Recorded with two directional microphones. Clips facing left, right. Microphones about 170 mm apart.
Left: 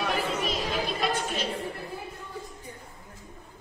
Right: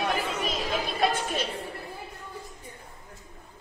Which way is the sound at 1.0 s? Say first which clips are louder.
Right 2 dB; 55° right (ahead or behind).